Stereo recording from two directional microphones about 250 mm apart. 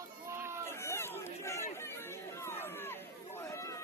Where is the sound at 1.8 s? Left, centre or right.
Centre.